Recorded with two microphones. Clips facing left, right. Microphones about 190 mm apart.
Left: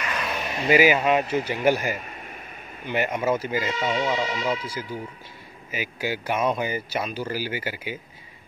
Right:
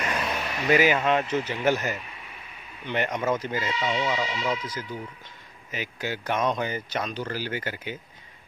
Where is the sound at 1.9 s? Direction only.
45° left (ahead or behind).